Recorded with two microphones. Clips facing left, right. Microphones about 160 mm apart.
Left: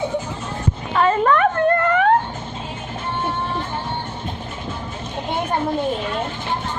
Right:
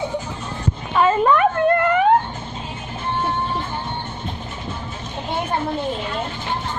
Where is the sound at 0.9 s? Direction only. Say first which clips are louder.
Right 1 dB; 10° right (ahead or behind).